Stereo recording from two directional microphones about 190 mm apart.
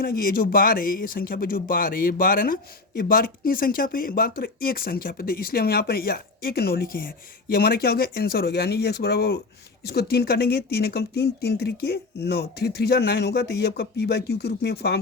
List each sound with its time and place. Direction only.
0.0 s speech: 50° left (ahead or behind)